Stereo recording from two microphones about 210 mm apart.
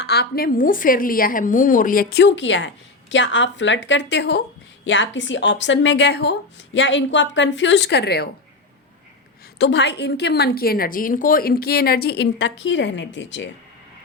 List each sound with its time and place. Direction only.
0.0 s a woman's voice: 50° left (ahead or behind)
9.6 s a woman's voice: 55° left (ahead or behind)